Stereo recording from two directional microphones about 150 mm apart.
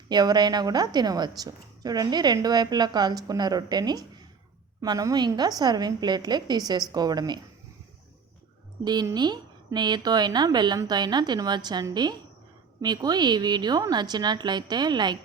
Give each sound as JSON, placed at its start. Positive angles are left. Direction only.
{"t": 0.1, "sound": "a woman's voice", "side_deg": -30}
{"t": 8.8, "sound": "a woman's voice", "side_deg": -25}